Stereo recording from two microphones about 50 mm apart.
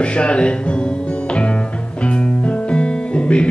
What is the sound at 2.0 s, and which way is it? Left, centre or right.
Music, left.